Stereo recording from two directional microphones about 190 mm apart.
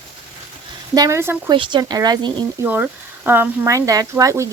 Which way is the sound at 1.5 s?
25° right (ahead or behind).